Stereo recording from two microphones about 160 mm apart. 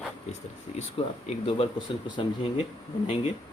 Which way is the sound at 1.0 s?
35° left (ahead or behind).